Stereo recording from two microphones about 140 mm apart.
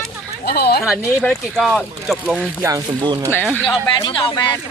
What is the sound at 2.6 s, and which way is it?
Speech, 30° right (ahead or behind).